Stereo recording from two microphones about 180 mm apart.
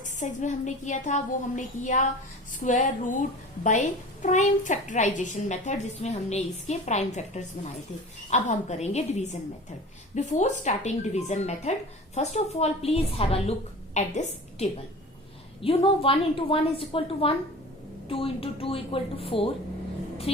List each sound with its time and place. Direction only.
0.0 s a woman's voice: 45° left (ahead or behind)
15.6 s a woman's voice: 30° left (ahead or behind)